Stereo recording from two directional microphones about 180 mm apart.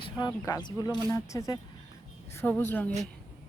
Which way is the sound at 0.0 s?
20° left (ahead or behind).